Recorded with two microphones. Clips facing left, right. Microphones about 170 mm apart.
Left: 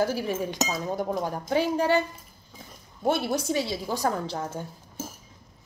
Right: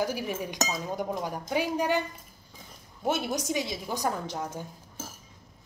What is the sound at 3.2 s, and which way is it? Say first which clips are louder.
A woman's voice: left 3 dB; 15° right (ahead or behind).